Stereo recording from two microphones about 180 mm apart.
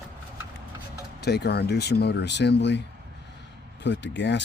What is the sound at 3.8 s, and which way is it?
Speech, 75° left (ahead or behind).